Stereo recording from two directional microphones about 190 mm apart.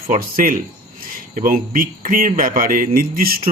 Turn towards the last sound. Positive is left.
turn(degrees=-50)  # may be behind; listen again after turning